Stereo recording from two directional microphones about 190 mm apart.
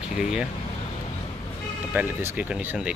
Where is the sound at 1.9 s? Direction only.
10° right (ahead or behind).